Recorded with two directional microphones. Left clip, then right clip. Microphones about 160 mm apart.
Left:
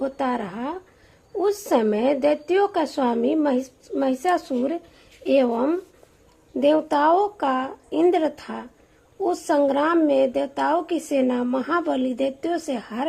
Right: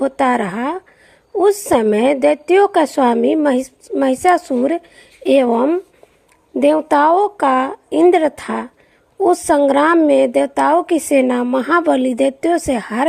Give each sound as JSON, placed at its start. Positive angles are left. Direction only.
{"t": 0.0, "sound": "a woman's voice", "side_deg": -35}